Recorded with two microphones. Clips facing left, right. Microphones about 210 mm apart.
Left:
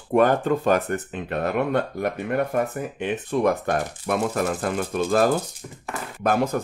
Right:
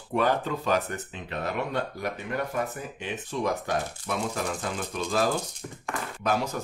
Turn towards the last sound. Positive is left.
turn(degrees=55)  # may be behind; listen again after turning